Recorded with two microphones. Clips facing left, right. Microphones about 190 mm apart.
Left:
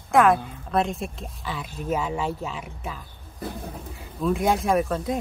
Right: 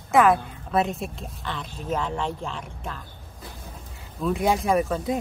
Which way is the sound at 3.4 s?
65° left (ahead or behind).